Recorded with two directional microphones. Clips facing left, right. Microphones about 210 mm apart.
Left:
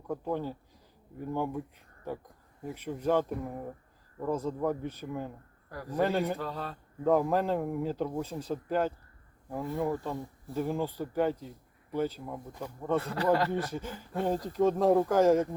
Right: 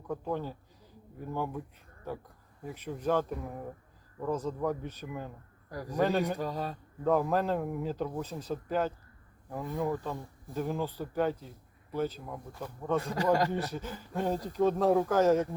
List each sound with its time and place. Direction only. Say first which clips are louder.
0.1 s a man's voice: left 1 dB; 15° left (ahead or behind)
5.7 s a man's voice: even; 10° right (ahead or behind)
6.0 s a man's voice: even; 10° left (ahead or behind)
6.2 s a man's voice: right 1 dB; 15° right (ahead or behind)
7.0 s a man's voice: left 1 dB; 15° left (ahead or behind)
13.0 s a man's voice: right 1 dB; 15° right (ahead or behind)
13.7 s a man's voice: left 1 dB; 10° left (ahead or behind)
14.3 s a man's voice: left 2 dB; 10° right (ahead or behind)
14.6 s a man's voice: left 1 dB; 10° left (ahead or behind)